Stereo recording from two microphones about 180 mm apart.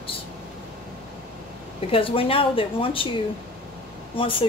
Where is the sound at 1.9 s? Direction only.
30° left (ahead or behind).